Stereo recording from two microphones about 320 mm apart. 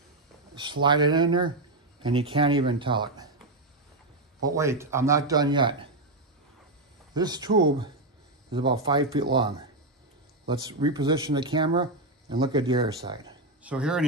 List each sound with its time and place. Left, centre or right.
0.6 s a man's voice: centre
4.4 s a man's voice: centre
7.2 s a man's voice: centre